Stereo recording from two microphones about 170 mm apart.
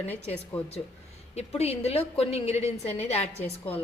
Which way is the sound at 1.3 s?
35° left (ahead or behind).